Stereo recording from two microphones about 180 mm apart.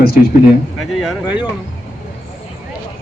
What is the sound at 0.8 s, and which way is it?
Speech, centre (ahead or behind).